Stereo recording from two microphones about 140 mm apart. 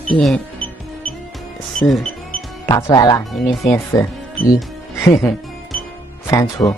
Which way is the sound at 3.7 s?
20° left (ahead or behind).